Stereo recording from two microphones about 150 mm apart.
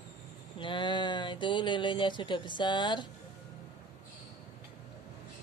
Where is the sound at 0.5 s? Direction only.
30° left (ahead or behind).